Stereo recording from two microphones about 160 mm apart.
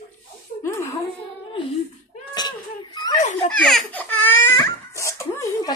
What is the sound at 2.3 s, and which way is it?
Crying, 25° left (ahead or behind).